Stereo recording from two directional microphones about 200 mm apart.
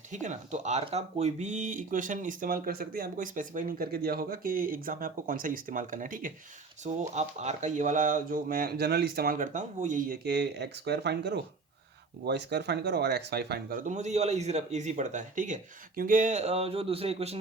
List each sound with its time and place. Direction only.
0.1 s speech: 35° right (ahead or behind)